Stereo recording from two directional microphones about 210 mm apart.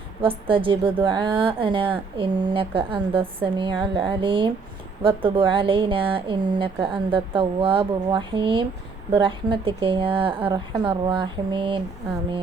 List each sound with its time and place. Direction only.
0.2 s speech: 25° right (ahead or behind)